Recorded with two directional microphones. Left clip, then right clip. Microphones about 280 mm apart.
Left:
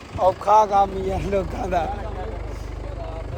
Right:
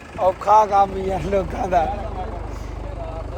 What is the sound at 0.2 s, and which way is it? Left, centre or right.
Speech, centre.